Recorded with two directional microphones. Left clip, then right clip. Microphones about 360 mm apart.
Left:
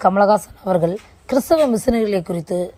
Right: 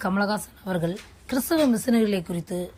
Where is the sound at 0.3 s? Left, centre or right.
Left.